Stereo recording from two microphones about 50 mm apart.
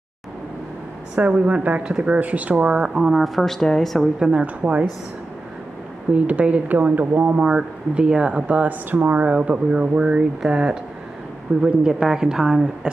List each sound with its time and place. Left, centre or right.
1.1 s speech: right
1.9 s speech: centre
2.1 s speech: right; by 4.1 s centre
4.2 s speech: right
6.1 s speech: right
7.4 s speech: centre